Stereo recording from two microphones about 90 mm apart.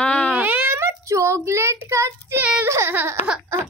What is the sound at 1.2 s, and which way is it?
Child singing, 30° right (ahead or behind).